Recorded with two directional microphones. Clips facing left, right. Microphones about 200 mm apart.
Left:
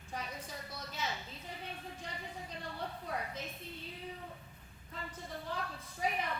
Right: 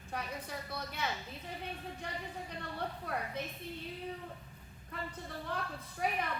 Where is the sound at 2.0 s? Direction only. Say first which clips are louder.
Right 5 dB; 60° right (ahead or behind).